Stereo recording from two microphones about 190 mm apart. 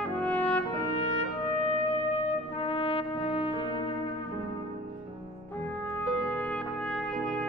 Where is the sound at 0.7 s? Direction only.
30° left (ahead or behind).